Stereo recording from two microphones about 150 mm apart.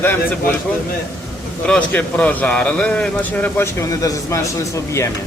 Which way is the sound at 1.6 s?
10° left (ahead or behind).